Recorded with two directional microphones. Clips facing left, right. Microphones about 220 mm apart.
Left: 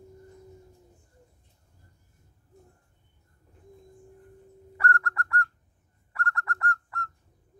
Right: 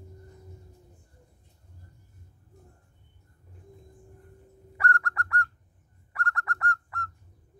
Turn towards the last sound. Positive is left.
turn(degrees=-15)  # may be behind; listen again after turning